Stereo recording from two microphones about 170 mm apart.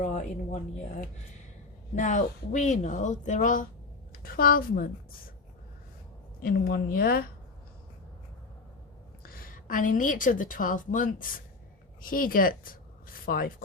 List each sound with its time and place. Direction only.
0.0 s speech: 45° left (ahead or behind)
2.0 s a woman's voice: 45° left (ahead or behind)
6.4 s a woman's voice: 65° left (ahead or behind)
9.2 s a woman's voice: 60° left (ahead or behind)